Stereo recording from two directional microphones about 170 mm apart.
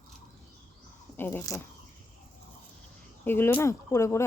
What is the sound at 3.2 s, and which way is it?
Speech, 15° left (ahead or behind).